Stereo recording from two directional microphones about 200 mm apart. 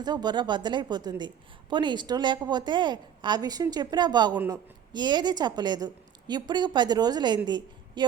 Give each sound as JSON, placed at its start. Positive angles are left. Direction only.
{"t": 0.0, "sound": "a woman's voice", "side_deg": -20}